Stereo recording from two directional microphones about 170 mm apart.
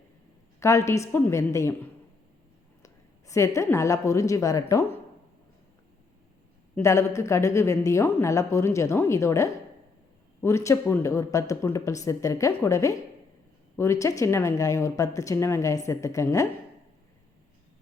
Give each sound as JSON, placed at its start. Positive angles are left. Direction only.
{"t": 0.6, "sound": "a woman's voice", "side_deg": 15}
{"t": 6.7, "sound": "a woman's voice", "side_deg": 15}